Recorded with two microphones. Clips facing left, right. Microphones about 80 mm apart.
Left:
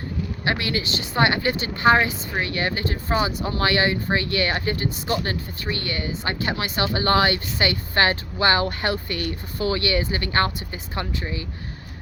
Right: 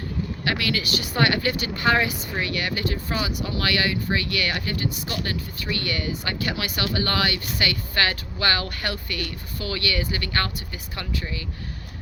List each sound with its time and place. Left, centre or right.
0.4 s speech: left